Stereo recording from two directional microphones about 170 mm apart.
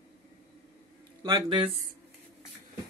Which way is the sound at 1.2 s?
25° right (ahead or behind).